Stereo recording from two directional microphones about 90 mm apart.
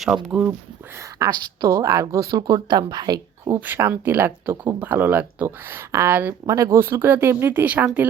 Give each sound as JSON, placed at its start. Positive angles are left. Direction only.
{"t": 0.0, "sound": "speech", "side_deg": -5}
{"t": 1.2, "sound": "speech", "side_deg": -40}
{"t": 3.5, "sound": "speech", "side_deg": -30}
{"t": 6.4, "sound": "speech", "side_deg": -40}